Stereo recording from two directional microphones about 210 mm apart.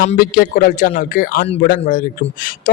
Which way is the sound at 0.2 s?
40° left (ahead or behind).